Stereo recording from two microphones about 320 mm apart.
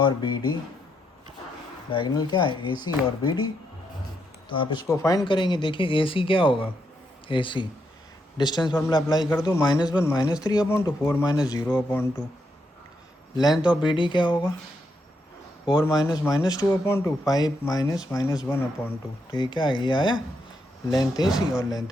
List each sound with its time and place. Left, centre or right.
0.0 s speech: centre
1.9 s speech: centre
13.3 s speech: centre
15.8 s speech: centre